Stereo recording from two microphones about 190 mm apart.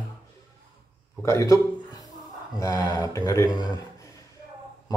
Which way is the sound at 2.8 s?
15° left (ahead or behind).